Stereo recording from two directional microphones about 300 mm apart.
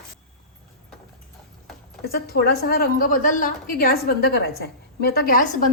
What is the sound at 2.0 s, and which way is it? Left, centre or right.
A woman's voice, left.